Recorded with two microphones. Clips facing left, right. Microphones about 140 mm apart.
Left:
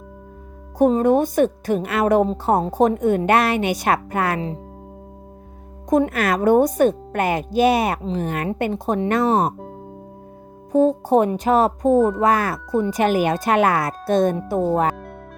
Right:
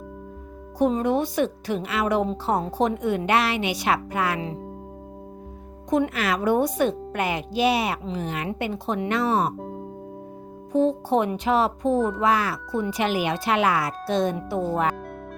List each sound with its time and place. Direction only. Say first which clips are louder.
0.8 s a woman's voice: left 6 dB; 45° left (ahead or behind)
5.9 s a woman's voice: left 5 dB; 45° left (ahead or behind)
10.7 s a woman's voice: left 5 dB; 45° left (ahead or behind)